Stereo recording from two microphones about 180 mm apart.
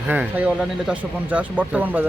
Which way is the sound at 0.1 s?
10° right (ahead or behind).